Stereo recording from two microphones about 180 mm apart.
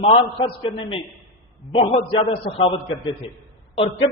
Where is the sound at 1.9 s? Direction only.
30° left (ahead or behind).